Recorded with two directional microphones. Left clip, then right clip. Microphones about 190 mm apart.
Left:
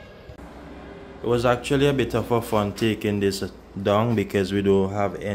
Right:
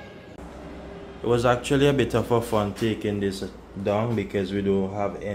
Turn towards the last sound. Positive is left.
turn(degrees=30)  # may be behind; listen again after turning